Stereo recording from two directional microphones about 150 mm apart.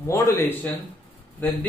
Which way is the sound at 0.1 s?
20° left (ahead or behind).